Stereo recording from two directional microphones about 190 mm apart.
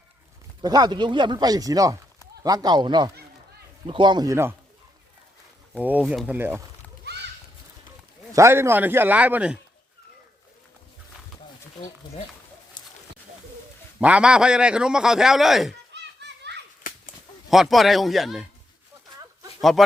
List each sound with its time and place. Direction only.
0.6 s speech: 20° right (ahead or behind)
5.8 s a man's voice: 10° right (ahead or behind)
8.3 s a man's voice: 15° right (ahead or behind)
12.8 s a sound: 20° left (ahead or behind)
14.0 s a man's voice: 5° right (ahead or behind)
15.7 s children playing: 65° right (ahead or behind)
16.9 s a sound: 45° left (ahead or behind)
17.5 s a man's voice: centre (ahead or behind)